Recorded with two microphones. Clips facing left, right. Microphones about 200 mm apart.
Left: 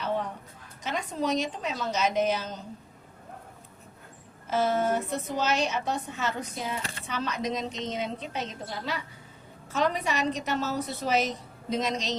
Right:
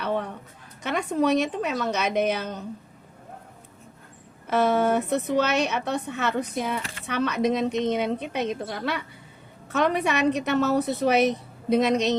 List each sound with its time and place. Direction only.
0.0 s a sound: 60° right (ahead or behind)
0.8 s a woman's voice: 60° right (ahead or behind)
4.4 s a woman's voice: 65° right (ahead or behind)